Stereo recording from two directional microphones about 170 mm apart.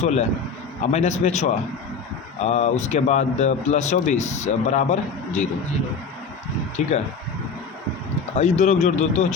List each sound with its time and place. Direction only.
0.0 s a man's voice: 40° left (ahead or behind)
6.8 s speech: 45° left (ahead or behind)
8.4 s speech: 45° left (ahead or behind)